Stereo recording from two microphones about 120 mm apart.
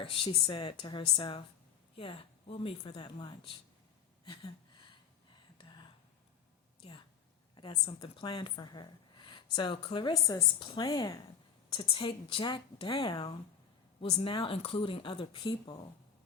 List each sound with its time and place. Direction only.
0.0 s speech: 45° left (ahead or behind)
4.3 s a sound: 40° left (ahead or behind)
7.5 s a sound: 40° left (ahead or behind)
7.9 s a woman's voice: 50° left (ahead or behind); by 11.2 s 30° left (ahead or behind)
11.7 s speech: 45° left (ahead or behind)
14.0 s speech: 50° left (ahead or behind)